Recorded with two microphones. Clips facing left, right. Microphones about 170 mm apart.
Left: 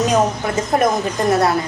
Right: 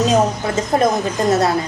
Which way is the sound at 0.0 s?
25° right (ahead or behind).